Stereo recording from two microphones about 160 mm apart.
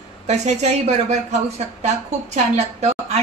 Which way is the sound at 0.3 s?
45° right (ahead or behind).